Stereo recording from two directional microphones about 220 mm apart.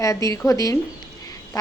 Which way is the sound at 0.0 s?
15° left (ahead or behind).